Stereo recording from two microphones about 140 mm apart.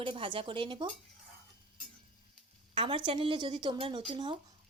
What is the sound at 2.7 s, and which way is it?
Speech, 40° right (ahead or behind).